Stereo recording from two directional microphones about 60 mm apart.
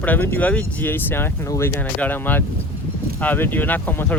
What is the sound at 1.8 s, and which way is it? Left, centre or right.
Speech, left.